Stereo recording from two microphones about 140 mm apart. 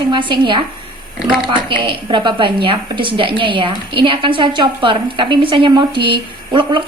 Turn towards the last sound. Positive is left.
turn(degrees=-35)  # may be behind; listen again after turning